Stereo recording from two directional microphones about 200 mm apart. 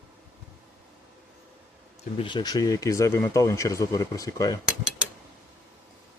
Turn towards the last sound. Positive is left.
turn(degrees=-5)  # may be behind; listen again after turning